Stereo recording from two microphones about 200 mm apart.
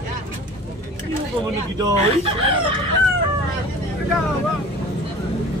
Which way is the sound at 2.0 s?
30° right (ahead or behind).